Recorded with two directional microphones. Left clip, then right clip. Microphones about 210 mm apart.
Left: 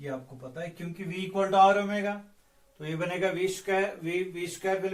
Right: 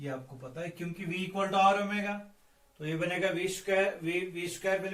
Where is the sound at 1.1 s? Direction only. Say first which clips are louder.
Left 4 dB; 20° left (ahead or behind).